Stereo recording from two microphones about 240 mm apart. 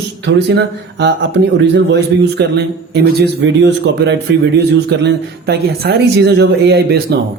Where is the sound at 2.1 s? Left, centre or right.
Right.